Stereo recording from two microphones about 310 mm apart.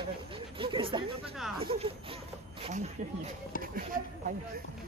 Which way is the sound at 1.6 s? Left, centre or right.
Centre.